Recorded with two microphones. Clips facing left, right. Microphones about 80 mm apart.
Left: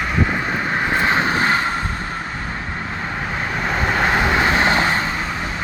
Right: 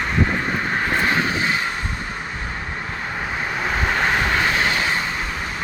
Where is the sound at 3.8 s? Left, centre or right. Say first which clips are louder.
Left 3 dB; centre.